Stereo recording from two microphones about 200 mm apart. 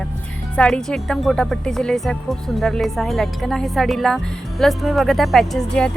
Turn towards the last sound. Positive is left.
turn(degrees=5)  # may be behind; listen again after turning